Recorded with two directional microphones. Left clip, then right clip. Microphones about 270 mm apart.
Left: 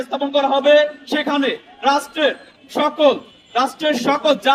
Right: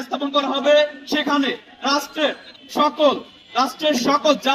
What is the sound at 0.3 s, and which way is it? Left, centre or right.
Speech, left.